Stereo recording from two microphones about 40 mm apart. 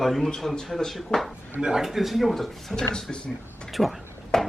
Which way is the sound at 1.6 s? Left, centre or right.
Centre.